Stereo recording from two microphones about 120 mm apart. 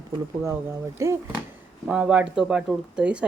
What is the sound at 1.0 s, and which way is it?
Speech, 25° right (ahead or behind).